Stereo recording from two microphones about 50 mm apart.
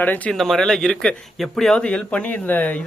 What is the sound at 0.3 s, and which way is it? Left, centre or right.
Speech, centre.